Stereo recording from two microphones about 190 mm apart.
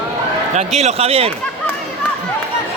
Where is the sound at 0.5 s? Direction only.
35° right (ahead or behind).